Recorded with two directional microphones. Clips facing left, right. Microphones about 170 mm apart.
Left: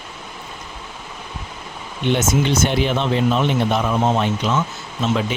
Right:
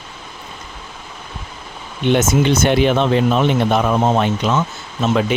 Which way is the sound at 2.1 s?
60° right (ahead or behind).